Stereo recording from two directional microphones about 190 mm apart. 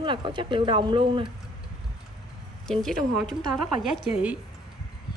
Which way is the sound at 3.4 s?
Centre (ahead or behind).